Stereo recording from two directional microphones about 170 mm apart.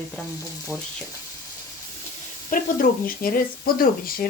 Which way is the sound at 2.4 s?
55° left (ahead or behind).